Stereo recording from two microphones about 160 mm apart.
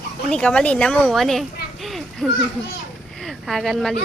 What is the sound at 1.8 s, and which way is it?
Children playing, centre (ahead or behind).